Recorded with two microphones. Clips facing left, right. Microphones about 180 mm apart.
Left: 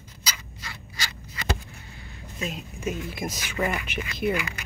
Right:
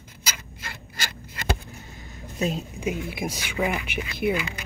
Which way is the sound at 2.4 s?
35° right (ahead or behind).